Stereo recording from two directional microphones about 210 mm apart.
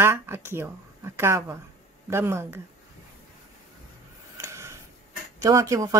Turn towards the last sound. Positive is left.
turn(degrees=-15)  # may be behind; listen again after turning